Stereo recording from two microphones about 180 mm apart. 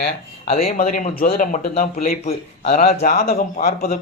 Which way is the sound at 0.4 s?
35° left (ahead or behind).